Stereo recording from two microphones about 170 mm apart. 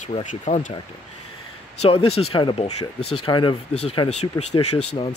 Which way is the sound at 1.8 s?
35° left (ahead or behind).